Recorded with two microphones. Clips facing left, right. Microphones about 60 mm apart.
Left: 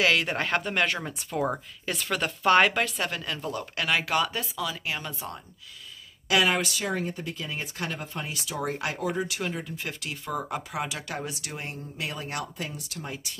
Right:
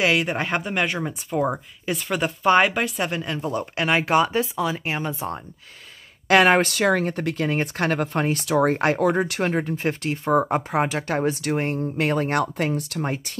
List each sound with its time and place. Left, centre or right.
0.0 s speech: centre
3.1 s speech: right
6.2 s speech: right